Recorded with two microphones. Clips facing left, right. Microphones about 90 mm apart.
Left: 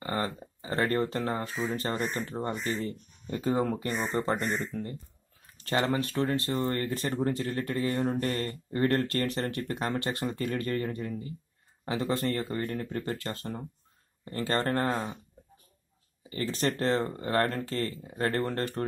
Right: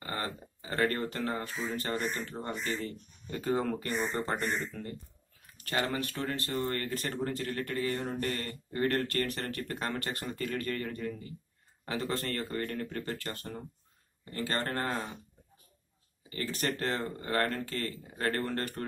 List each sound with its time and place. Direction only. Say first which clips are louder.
0.0 s a sound: left 5 dB; 25° left (ahead or behind)
1.8 s speech: left 2 dB; 25° left (ahead or behind)
16.3 s speech: left 4 dB; 30° left (ahead or behind)